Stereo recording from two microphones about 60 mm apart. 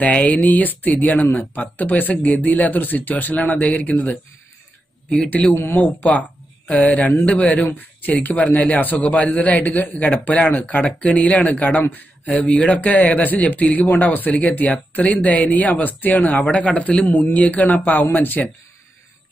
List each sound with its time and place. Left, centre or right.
0.0 s a man's voice: left
5.5 s speech: left
6.1 s speech: left